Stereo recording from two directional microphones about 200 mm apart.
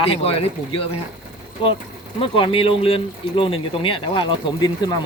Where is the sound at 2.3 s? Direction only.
25° left (ahead or behind).